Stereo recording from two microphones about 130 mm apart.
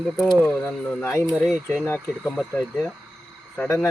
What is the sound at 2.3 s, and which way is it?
Speech, 5° left (ahead or behind).